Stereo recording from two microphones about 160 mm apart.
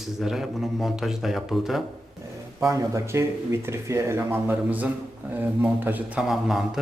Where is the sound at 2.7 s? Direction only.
20° right (ahead or behind).